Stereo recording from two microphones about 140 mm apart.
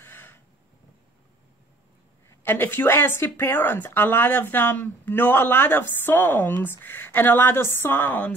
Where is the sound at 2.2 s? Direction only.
15° left (ahead or behind).